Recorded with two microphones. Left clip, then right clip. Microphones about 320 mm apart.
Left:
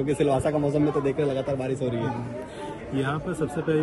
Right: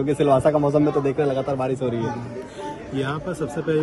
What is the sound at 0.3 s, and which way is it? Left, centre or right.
Speech, right.